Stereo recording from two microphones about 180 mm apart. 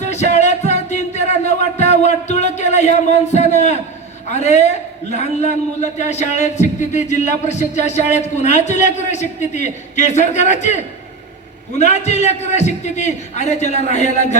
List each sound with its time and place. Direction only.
0.0 s music: 40° left (ahead or behind)
4.3 s a man's voice: 40° left (ahead or behind)
11.8 s a man's voice: 40° left (ahead or behind)